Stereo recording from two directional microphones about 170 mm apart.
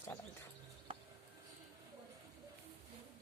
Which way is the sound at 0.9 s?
35° right (ahead or behind).